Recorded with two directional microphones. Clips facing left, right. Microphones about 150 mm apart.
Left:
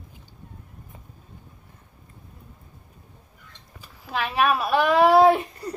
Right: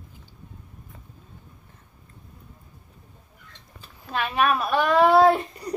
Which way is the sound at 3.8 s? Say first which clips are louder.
Even; 5° left (ahead or behind).